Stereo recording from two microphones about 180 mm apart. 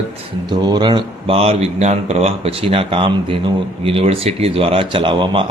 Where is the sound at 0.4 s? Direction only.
25° right (ahead or behind).